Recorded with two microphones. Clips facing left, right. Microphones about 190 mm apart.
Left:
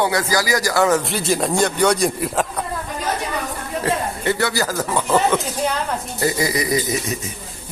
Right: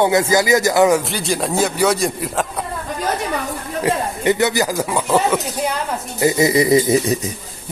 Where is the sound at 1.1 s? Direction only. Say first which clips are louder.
Left 1 dB; centre (ahead or behind).